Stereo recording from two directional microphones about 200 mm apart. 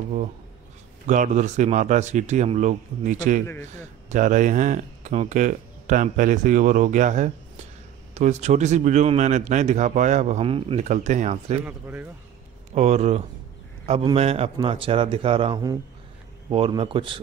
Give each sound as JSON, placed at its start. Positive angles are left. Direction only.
{"t": 1.0, "sound": "speech", "side_deg": -40}
{"t": 11.6, "sound": "speech", "side_deg": -10}
{"t": 12.7, "sound": "a man's voice", "side_deg": -35}